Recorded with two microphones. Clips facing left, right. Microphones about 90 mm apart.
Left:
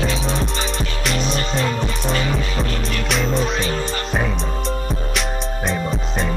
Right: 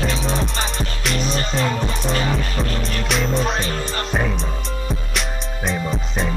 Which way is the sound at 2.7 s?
35° right (ahead or behind).